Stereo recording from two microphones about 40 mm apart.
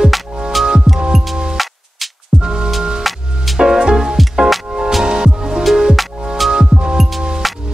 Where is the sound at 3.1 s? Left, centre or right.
Centre.